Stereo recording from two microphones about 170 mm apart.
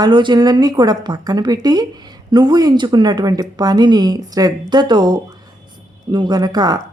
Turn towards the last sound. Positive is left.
turn(degrees=-25)  # may be behind; listen again after turning